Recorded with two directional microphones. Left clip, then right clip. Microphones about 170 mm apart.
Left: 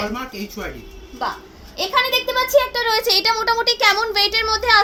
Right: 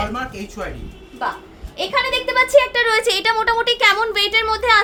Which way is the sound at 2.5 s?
15° right (ahead or behind).